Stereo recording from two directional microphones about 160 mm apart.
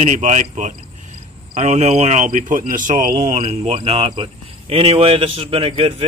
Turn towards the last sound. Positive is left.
turn(degrees=-35)  # may be behind; listen again after turning